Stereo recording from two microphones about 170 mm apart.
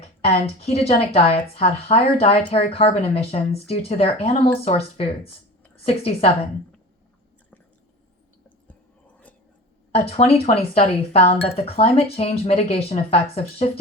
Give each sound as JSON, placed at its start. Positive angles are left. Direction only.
{"t": 0.2, "sound": "speech", "side_deg": 35}
{"t": 9.9, "sound": "speech", "side_deg": 35}